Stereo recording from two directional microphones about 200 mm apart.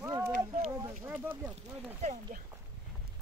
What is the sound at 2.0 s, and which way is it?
Speech, 40° right (ahead or behind).